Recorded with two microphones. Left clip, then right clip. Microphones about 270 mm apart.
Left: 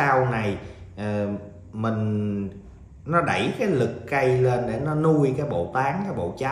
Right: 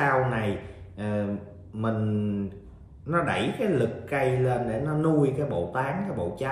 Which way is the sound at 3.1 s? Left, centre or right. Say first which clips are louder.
Left 4 dB; centre.